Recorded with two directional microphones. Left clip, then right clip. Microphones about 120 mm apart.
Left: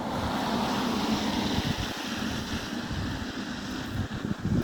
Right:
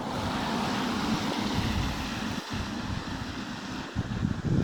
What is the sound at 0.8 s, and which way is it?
Vehicle, 20° left (ahead or behind).